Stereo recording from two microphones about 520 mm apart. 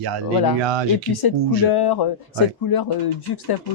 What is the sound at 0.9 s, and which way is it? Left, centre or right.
Speech, left.